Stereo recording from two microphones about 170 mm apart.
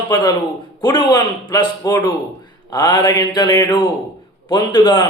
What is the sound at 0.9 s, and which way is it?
A man's voice, 25° left (ahead or behind).